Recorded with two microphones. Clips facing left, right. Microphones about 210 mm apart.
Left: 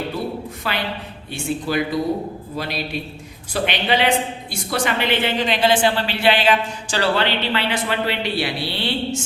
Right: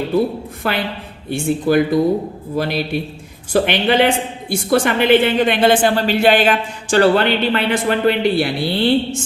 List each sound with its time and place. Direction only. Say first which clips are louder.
0.6 s a woman's voice: right 6 dB; 55° right (ahead or behind)